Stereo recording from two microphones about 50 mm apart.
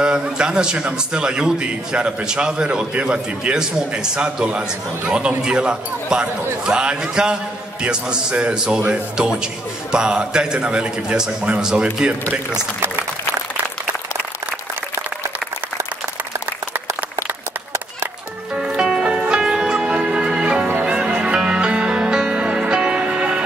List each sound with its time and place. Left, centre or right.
0.0 s a man's voice: centre
18.5 s music: centre